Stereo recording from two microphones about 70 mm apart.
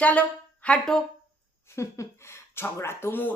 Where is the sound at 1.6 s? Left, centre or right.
Left.